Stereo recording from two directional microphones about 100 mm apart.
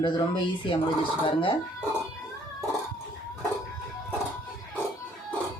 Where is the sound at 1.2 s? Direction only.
60° left (ahead or behind).